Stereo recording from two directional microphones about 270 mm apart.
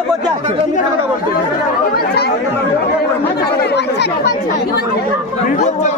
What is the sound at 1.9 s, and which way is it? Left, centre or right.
Chatter, left.